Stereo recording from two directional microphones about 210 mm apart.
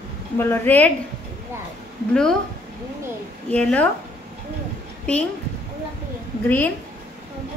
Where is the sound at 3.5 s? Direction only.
5° left (ahead or behind).